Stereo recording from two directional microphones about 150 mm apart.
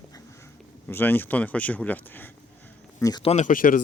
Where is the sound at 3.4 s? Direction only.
65° left (ahead or behind).